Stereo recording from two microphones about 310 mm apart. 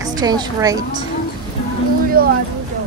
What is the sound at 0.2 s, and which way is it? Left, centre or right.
Speech, centre.